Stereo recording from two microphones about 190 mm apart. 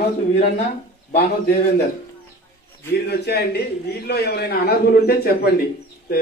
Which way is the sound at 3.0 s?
60° left (ahead or behind).